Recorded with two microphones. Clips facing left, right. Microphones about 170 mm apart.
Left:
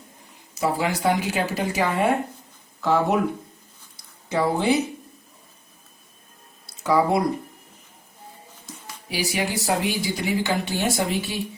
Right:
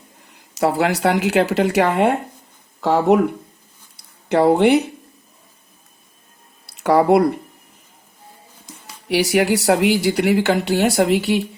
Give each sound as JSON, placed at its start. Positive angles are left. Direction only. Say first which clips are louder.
{"t": 0.5, "sound": "speech", "louder": "right 6 dB", "side_deg": -70}
{"t": 3.9, "sound": "a sound", "louder": "right 7 dB", "side_deg": -65}
{"t": 6.7, "sound": "speech", "louder": "right 6 dB", "side_deg": -70}
{"t": 9.0, "sound": "speech", "louder": "right 10 dB", "side_deg": -70}